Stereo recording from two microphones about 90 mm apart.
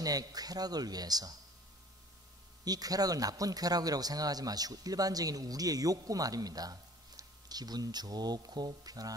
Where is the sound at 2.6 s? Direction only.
45° right (ahead or behind).